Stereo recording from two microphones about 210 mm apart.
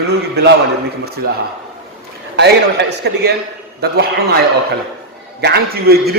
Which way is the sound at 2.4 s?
55° right (ahead or behind).